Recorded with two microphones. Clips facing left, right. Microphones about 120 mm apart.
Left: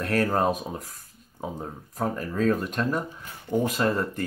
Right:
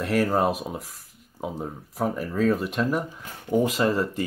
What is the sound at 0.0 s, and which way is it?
Speech, 5° right (ahead or behind).